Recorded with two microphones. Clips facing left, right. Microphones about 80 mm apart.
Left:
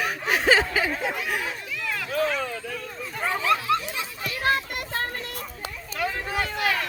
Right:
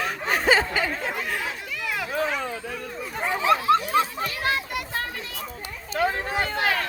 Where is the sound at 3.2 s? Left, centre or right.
Right.